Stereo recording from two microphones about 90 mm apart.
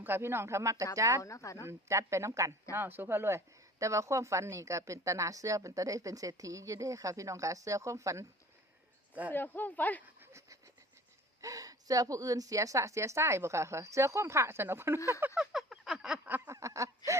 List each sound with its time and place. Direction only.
0.0 s speech: 25° right (ahead or behind)
1.2 s speech: 35° left (ahead or behind)
1.6 s speech: 35° right (ahead or behind)
2.7 s speech: 25° right (ahead or behind)
9.3 s speech: 20° left (ahead or behind)
10.2 s a sound: 30° right (ahead or behind)
11.3 s speech: 40° right (ahead or behind)
15.4 s a sound: 5° right (ahead or behind)
16.5 s a sound: 35° right (ahead or behind)